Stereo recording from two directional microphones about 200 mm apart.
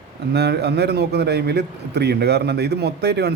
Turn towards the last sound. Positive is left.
turn(degrees=-55)  # may be behind; listen again after turning